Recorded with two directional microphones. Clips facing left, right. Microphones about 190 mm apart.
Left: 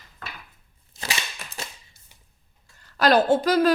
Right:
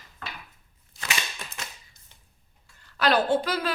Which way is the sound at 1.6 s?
30° left (ahead or behind).